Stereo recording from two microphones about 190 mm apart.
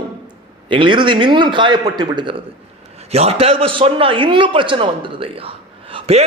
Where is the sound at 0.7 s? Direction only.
25° right (ahead or behind).